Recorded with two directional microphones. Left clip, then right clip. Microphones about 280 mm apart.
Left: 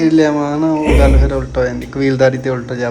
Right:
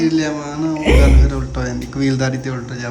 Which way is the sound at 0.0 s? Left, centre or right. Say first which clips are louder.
Left 6 dB; centre.